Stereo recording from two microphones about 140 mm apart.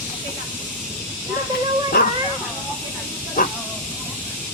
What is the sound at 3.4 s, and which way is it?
Hiss, 65° left (ahead or behind).